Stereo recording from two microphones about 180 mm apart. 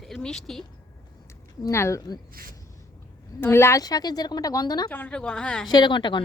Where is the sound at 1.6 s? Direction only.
15° left (ahead or behind).